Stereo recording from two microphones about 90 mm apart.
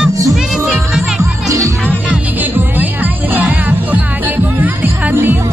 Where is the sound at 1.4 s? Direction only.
35° right (ahead or behind).